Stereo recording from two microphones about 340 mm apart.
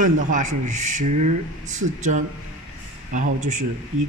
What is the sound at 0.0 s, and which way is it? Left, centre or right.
A man's voice, right.